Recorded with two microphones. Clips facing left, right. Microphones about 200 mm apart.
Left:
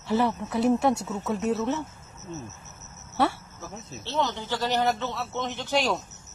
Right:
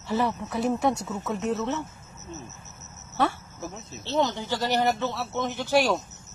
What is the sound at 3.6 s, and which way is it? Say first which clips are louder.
Speech: right 2 dB; 15° right (ahead or behind).